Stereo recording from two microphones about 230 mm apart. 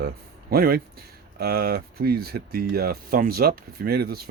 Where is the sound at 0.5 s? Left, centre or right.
Right.